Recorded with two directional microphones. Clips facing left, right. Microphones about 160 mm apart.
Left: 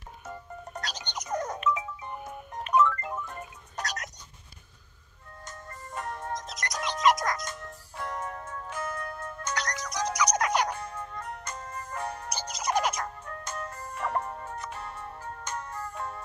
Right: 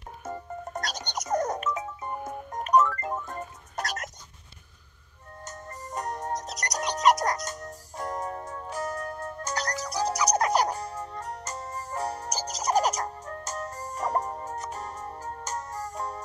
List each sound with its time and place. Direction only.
0.3 s music: 45° right (ahead or behind)
5.5 s music: 40° right (ahead or behind)